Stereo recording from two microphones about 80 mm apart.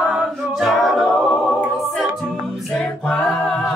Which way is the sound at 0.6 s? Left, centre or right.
Centre.